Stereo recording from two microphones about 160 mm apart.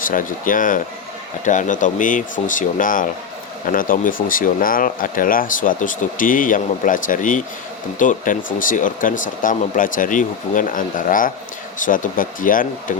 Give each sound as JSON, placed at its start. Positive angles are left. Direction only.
{"t": 0.0, "sound": "speech", "side_deg": 55}